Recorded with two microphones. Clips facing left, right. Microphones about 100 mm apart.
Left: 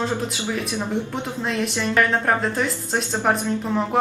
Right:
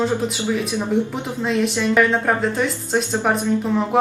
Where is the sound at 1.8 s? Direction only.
5° right (ahead or behind).